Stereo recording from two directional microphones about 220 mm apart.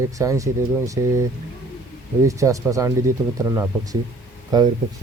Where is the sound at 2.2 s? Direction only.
15° right (ahead or behind).